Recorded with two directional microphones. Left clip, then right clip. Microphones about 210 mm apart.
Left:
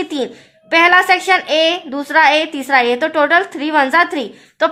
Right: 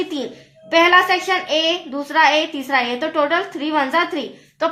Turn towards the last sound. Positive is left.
turn(degrees=45)  # may be behind; listen again after turning